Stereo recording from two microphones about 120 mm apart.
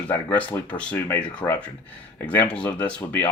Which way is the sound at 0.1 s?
15° left (ahead or behind).